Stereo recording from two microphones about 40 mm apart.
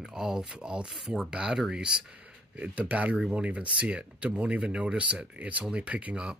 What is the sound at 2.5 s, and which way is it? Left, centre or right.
Speech, right.